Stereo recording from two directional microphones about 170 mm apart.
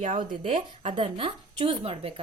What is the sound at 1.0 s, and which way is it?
A woman's voice, 30° right (ahead or behind).